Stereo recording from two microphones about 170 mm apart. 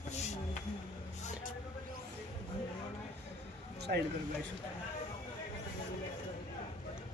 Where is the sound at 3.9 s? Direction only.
60° right (ahead or behind).